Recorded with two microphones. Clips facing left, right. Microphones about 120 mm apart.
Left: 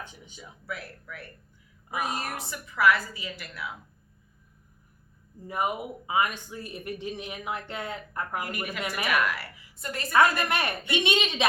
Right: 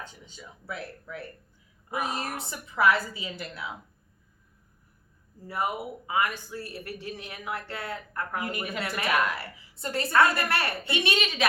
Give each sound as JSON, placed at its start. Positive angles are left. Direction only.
{"t": 0.0, "sound": "speech", "side_deg": 15}
{"t": 0.6, "sound": "a woman's voice", "side_deg": -25}
{"t": 5.5, "sound": "speech", "side_deg": 20}
{"t": 8.4, "sound": "a woman's voice", "side_deg": -25}
{"t": 10.1, "sound": "speech", "side_deg": 20}